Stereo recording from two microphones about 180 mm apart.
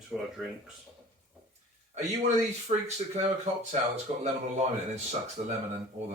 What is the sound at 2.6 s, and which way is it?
Speech, 35° right (ahead or behind).